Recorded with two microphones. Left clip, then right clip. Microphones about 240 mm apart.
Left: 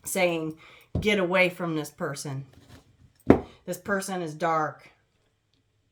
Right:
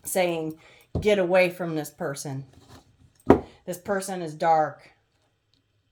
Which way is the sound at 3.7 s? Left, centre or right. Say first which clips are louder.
Right 1 dB; centre.